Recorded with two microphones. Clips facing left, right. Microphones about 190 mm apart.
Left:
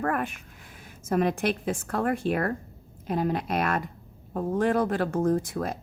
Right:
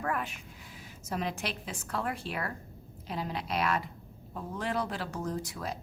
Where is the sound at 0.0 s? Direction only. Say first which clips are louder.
Left 6 dB; 55° left (ahead or behind).